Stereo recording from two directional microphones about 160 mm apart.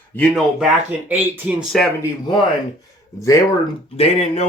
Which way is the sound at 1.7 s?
Centre (ahead or behind).